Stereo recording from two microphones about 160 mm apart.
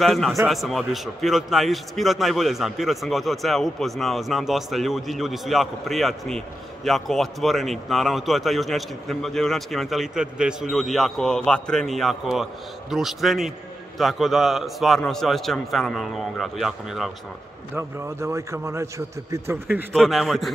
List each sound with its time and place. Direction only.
0.0 s a man's voice: centre (ahead or behind)
17.7 s a man's voice: 15° right (ahead or behind)
19.9 s a man's voice: centre (ahead or behind)